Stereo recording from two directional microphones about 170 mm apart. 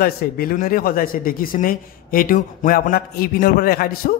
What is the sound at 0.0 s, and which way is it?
Speech, 60° left (ahead or behind).